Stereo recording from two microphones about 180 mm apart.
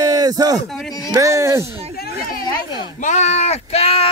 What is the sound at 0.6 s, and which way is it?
Speech, centre (ahead or behind).